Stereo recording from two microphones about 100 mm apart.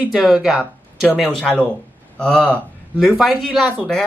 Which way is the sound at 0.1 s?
5° right (ahead or behind).